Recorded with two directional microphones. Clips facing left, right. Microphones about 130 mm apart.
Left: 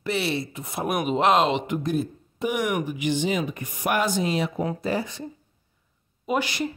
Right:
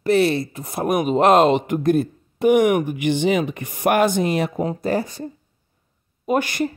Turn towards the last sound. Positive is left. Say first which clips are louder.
# right 5 dB
turn(degrees=-50)  # may be behind; listen again after turning